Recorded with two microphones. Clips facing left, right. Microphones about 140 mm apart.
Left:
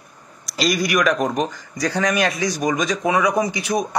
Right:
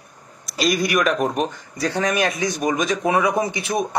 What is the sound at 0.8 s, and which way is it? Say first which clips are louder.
Speech: left 2 dB; 25° right (ahead or behind).